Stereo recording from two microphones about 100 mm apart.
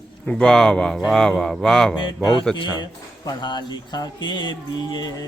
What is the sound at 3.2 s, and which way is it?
Speech, 50° left (ahead or behind).